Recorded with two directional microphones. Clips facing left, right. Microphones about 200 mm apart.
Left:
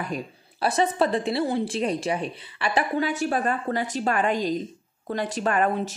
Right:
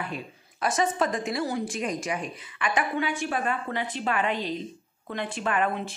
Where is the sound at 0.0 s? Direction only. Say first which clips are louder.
Left 4 dB; 35° left (ahead or behind).